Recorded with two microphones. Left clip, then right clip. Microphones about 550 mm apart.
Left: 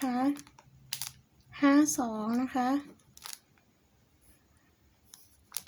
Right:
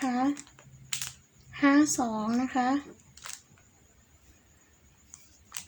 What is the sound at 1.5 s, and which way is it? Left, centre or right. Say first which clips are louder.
Speech: right 2 dB; left.